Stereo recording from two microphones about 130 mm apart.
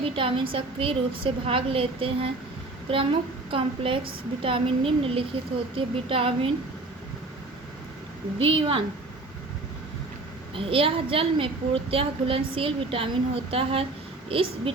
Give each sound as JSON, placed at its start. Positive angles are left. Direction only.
{"t": 0.0, "sound": "a woman's voice", "side_deg": -45}
{"t": 8.4, "sound": "a woman's voice", "side_deg": -45}
{"t": 10.5, "sound": "a woman's voice", "side_deg": -45}